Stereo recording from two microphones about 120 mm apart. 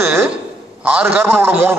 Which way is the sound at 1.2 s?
20° right (ahead or behind).